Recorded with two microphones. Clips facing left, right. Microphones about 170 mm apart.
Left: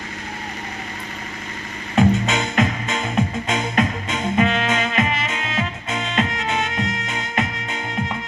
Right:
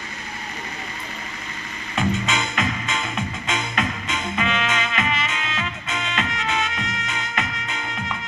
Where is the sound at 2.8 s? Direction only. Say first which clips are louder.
Left 5 dB; 40° left (ahead or behind).